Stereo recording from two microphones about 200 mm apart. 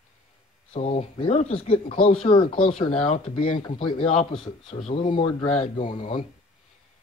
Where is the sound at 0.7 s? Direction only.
30° left (ahead or behind).